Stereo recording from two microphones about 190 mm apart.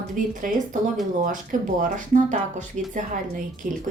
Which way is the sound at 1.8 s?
40° right (ahead or behind).